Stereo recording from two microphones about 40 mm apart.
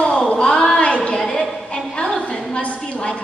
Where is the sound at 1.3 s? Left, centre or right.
Left.